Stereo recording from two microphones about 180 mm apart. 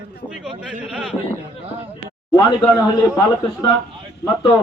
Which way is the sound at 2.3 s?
20° left (ahead or behind).